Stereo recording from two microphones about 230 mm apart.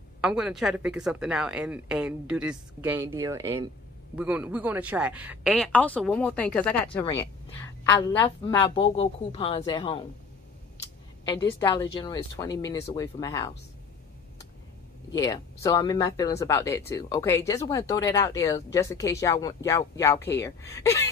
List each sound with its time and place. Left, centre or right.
0.2 s a woman's voice: centre; by 10.0 s left
11.2 s speech: centre
15.1 s speech: centre